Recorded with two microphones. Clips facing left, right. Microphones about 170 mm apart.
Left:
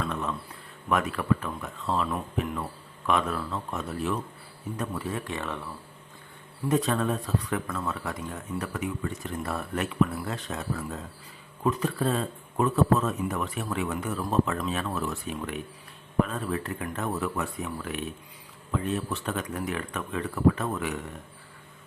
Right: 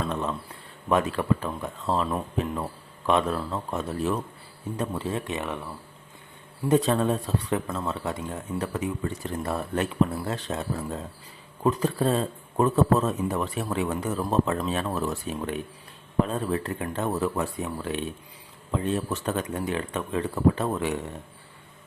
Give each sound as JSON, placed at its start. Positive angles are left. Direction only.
{"t": 0.0, "sound": "speech", "side_deg": -30}
{"t": 6.7, "sound": "speech", "side_deg": -30}